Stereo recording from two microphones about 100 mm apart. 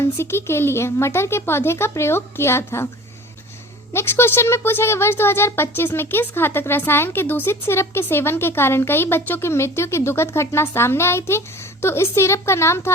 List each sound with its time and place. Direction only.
0.2 s speech: 25° left (ahead or behind)
3.9 s speech: 25° left (ahead or behind)